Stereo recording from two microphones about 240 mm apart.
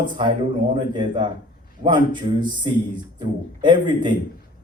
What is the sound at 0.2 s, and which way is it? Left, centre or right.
Speech, centre.